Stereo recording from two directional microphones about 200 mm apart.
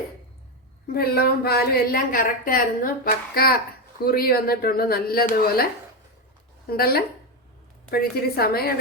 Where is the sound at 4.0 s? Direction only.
50° left (ahead or behind).